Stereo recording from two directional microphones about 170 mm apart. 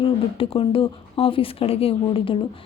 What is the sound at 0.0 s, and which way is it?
Speech, 30° left (ahead or behind).